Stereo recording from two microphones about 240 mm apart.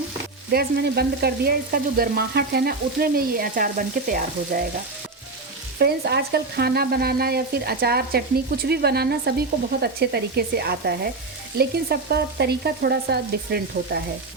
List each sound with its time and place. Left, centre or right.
0.5 s frying: right
5.8 s frying: right